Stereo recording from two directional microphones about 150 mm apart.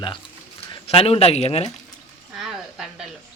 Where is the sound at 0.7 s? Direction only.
40° left (ahead or behind).